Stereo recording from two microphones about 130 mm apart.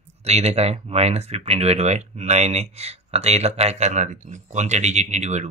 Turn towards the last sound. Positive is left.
turn(degrees=-60)  # may be behind; listen again after turning